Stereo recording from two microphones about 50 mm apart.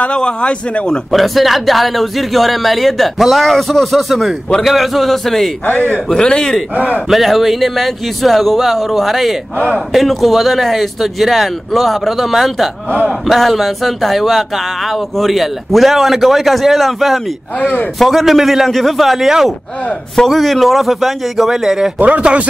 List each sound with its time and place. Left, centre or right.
0.0 s a man's voice: centre
1.1 s speech: centre
5.7 s a man's voice: left
6.0 s speech: centre
6.7 s a man's voice: right
7.1 s speech: centre
17.6 s a man's voice: left
17.9 s speech: centre
22.2 s speech: right